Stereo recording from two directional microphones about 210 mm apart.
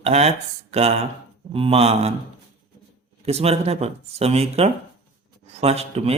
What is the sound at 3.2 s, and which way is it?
Speech, 30° right (ahead or behind).